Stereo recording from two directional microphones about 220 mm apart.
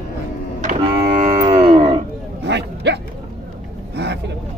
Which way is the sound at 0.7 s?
30° right (ahead or behind).